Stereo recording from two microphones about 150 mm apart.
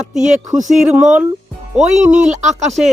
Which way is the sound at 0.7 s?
5° right (ahead or behind).